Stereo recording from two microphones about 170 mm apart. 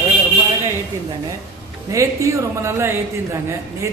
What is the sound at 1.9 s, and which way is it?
A man's voice, 15° right (ahead or behind).